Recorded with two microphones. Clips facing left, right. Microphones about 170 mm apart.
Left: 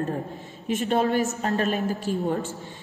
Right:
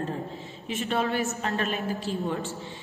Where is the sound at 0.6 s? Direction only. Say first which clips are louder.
Left 5 dB; 40° left (ahead or behind).